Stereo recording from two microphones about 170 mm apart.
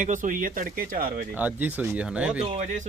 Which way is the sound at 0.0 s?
50° right (ahead or behind).